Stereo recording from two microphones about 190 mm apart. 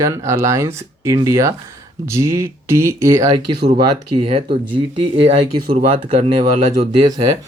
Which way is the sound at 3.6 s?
30° right (ahead or behind).